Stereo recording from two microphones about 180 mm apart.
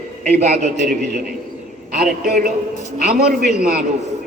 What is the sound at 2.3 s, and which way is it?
Speech, 60° right (ahead or behind).